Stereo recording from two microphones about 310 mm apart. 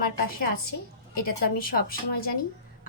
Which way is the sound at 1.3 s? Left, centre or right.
Left.